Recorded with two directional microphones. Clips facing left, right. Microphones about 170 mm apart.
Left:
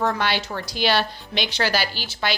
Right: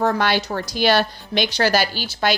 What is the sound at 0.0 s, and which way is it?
A woman's voice, 45° right (ahead or behind).